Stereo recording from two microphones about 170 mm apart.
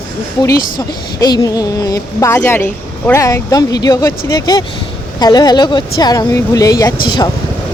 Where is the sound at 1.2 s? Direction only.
20° left (ahead or behind).